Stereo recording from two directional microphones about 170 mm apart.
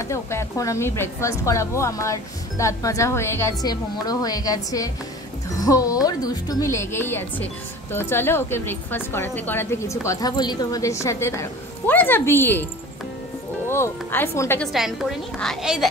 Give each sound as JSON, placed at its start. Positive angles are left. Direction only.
{"t": 0.1, "sound": "a woman's voice", "side_deg": 15}
{"t": 13.7, "sound": "speech", "side_deg": 15}
{"t": 14.6, "sound": "a woman's voice", "side_deg": 0}